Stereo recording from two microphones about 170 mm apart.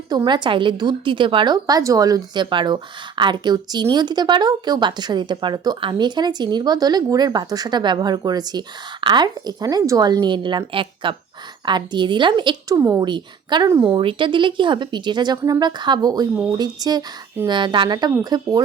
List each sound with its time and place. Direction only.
0.1 s speech: 25° right (ahead or behind)